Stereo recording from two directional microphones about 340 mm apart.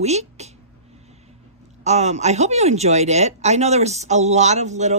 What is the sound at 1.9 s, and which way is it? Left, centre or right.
A man's voice, centre.